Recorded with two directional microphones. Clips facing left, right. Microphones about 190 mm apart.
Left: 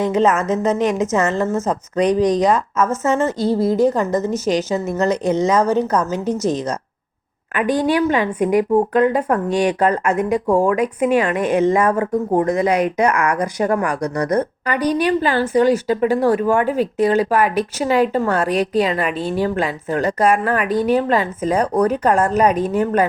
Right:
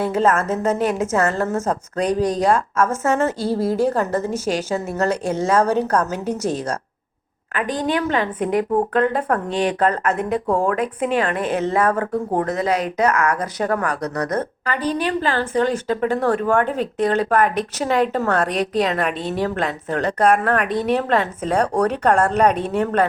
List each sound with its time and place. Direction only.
0.0 s a woman's voice: 5° right (ahead or behind)
7.5 s a woman's voice: 10° left (ahead or behind)